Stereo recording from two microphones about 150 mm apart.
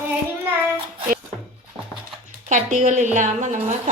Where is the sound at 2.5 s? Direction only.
55° right (ahead or behind).